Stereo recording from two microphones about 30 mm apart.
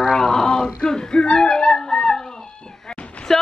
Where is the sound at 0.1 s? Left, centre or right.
Left.